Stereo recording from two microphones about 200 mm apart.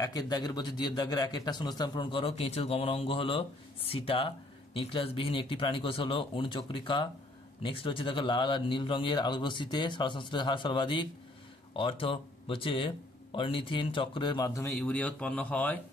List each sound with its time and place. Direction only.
0.0 s a man's voice: 20° left (ahead or behind)
14.7 s speech: 5° left (ahead or behind)